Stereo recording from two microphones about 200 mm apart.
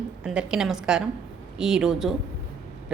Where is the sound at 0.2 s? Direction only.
5° right (ahead or behind).